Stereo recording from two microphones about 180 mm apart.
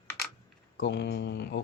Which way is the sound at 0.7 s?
70° left (ahead or behind).